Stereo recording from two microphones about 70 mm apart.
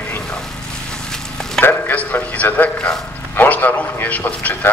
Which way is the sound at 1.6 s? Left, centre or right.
Left.